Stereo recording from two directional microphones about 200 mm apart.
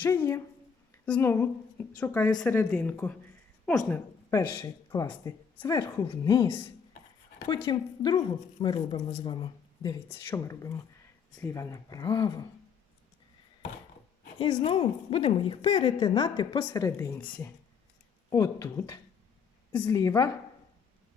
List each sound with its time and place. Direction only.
1.0 s a woman's voice: 10° left (ahead or behind)
14.5 s a woman's voice: 30° left (ahead or behind)